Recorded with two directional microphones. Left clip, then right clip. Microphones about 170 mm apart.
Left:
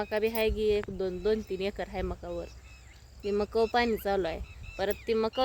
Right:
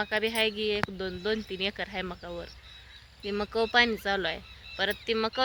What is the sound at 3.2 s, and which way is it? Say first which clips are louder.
Speech: left 2 dB; 25° left (ahead or behind).